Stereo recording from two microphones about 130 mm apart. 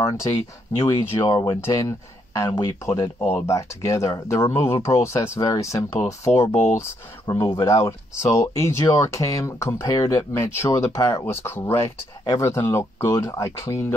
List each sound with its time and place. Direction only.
0.0 s speech: 25° left (ahead or behind)
6.5 s speech: 70° left (ahead or behind)
6.8 s speech: 20° left (ahead or behind)